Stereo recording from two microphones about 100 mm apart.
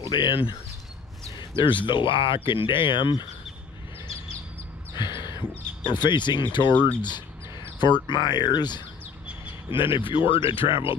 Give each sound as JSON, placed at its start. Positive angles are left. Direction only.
{"t": 0.1, "sound": "speech", "side_deg": 50}
{"t": 1.6, "sound": "speech", "side_deg": 55}
{"t": 5.9, "sound": "speech", "side_deg": 50}
{"t": 9.5, "sound": "speech", "side_deg": 60}